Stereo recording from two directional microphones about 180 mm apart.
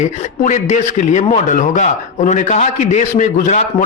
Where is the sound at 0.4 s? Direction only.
40° left (ahead or behind).